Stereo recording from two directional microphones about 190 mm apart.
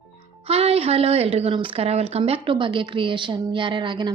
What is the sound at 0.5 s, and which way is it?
Speech, 30° right (ahead or behind).